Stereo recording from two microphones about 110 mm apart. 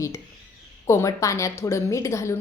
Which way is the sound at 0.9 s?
25° left (ahead or behind).